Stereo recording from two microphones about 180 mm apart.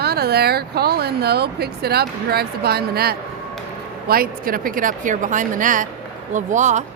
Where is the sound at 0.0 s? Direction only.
60° right (ahead or behind).